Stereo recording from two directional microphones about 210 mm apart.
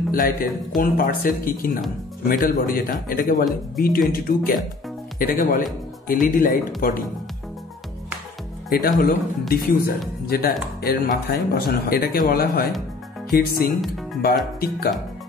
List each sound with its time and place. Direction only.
0.1 s a man's voice: 40° left (ahead or behind)
8.6 s speech: 45° left (ahead or behind)
13.7 s speech: centre (ahead or behind)
14.2 s speech: 45° left (ahead or behind)